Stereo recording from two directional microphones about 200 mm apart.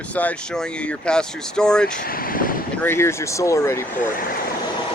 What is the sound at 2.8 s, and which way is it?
Speech, 10° left (ahead or behind).